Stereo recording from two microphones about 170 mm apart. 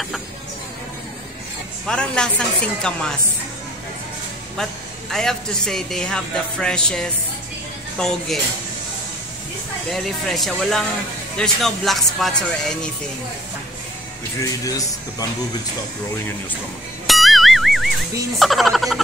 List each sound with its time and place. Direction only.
1.9 s speech: 5° left (ahead or behind)
5.1 s speech: 5° left (ahead or behind)
9.8 s speech: centre (ahead or behind)
14.4 s speech: 20° left (ahead or behind)
17.0 s music: centre (ahead or behind)
18.4 s speech: centre (ahead or behind)